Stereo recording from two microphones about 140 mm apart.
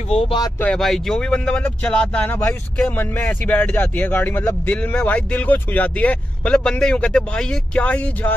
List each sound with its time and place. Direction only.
0.1 s speech: 45° left (ahead or behind)
0.6 s speech: 5° left (ahead or behind)